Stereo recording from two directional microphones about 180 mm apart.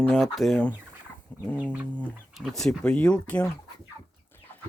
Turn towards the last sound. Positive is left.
turn(degrees=15)  # may be behind; listen again after turning